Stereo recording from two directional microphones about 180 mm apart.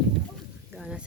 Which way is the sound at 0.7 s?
5° right (ahead or behind).